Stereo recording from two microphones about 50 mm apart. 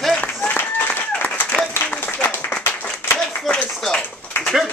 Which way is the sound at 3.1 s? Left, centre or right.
Centre.